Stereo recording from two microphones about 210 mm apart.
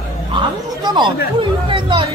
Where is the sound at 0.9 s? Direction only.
20° right (ahead or behind).